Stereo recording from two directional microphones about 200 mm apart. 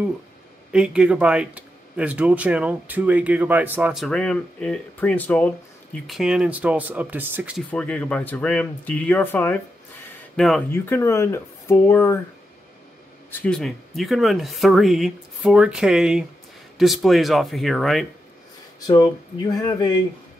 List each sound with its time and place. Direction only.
0.7 s speech: 5° right (ahead or behind)
7.7 s speech: 5° left (ahead or behind)
10.7 s speech: 10° left (ahead or behind)
13.3 s speech: 5° left (ahead or behind)
18.9 s speech: 20° left (ahead or behind)